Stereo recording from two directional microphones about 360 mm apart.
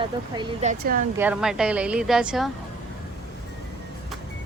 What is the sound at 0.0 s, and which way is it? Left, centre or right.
Speech, centre.